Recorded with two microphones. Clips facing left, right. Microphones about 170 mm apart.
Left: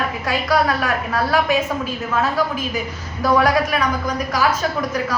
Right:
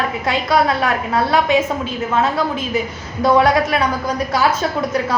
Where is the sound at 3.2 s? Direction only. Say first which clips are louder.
Right 3 dB; 25° right (ahead or behind).